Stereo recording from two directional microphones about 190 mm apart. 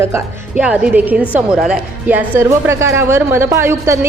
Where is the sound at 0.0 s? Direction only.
10° right (ahead or behind).